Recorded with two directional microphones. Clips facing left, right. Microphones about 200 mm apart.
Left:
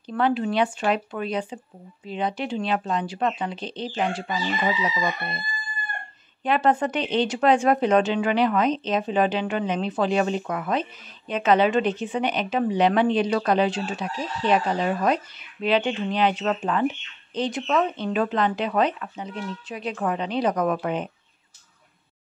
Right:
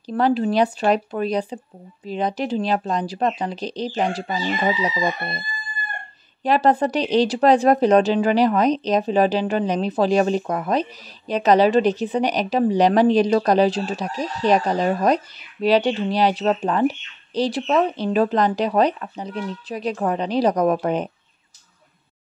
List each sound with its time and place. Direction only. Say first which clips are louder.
0.1 s speech: right 4 dB; 35° right (ahead or behind)
6.4 s speech: right 4 dB; 35° right (ahead or behind)